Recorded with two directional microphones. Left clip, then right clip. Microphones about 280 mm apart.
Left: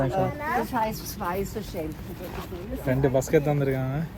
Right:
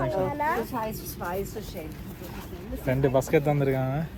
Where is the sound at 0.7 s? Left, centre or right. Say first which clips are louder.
Left 5 dB; left.